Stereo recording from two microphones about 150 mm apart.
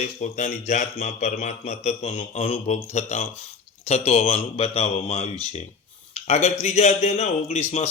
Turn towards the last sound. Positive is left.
turn(degrees=45)  # may be behind; listen again after turning